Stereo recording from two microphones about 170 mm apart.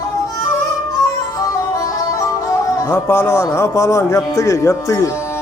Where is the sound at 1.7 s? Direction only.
20° left (ahead or behind).